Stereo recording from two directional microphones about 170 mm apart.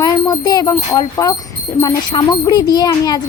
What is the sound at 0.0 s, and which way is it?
A child's voice, 20° left (ahead or behind).